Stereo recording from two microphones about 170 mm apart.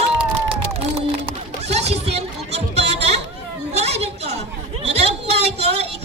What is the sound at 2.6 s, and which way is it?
Chatter, 40° right (ahead or behind).